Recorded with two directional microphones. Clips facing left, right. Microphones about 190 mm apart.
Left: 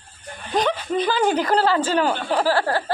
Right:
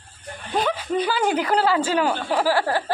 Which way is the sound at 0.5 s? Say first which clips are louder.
Left 1 dB; 10° right (ahead or behind).